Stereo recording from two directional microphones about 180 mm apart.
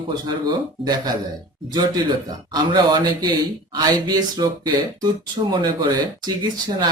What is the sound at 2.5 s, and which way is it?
Speech, 25° right (ahead or behind).